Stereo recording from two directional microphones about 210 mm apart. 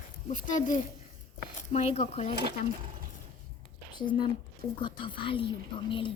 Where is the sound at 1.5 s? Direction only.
30° left (ahead or behind).